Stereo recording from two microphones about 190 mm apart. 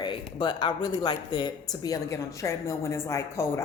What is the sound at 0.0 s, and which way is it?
Speech, 25° left (ahead or behind).